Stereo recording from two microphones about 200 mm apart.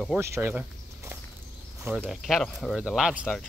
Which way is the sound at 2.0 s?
Centre (ahead or behind).